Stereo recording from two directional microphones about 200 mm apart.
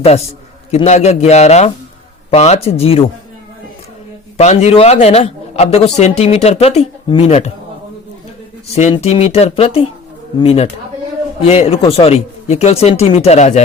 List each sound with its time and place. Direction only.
0.7 s a man's voice: 35° left (ahead or behind)
4.4 s a man's voice: 30° left (ahead or behind)
8.7 s a man's voice: 35° left (ahead or behind)